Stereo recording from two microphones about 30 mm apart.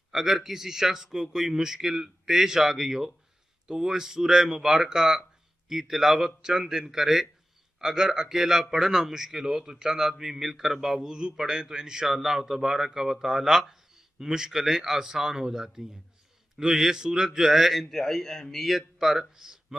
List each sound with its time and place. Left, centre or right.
0.1 s speech: centre
11.1 s speech: right
12.1 s speech: centre
17.8 s a man's voice: centre
18.6 s speech: centre